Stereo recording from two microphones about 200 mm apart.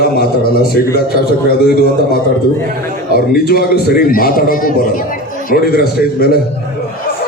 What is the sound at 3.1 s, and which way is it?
A man's voice, 50° left (ahead or behind).